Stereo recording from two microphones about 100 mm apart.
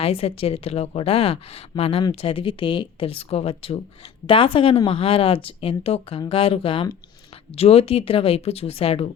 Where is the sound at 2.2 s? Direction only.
65° left (ahead or behind).